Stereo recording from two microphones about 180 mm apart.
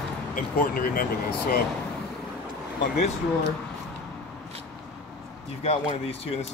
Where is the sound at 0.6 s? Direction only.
55° left (ahead or behind).